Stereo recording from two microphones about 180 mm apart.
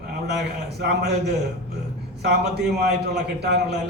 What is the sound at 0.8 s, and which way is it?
A man's voice, 65° right (ahead or behind).